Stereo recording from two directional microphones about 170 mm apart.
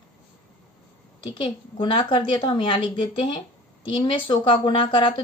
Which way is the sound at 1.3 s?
30° left (ahead or behind).